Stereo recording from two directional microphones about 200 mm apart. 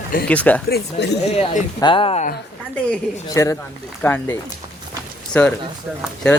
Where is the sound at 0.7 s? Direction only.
55° left (ahead or behind).